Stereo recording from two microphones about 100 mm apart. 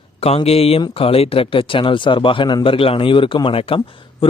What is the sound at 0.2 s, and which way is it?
Speech, 90° left.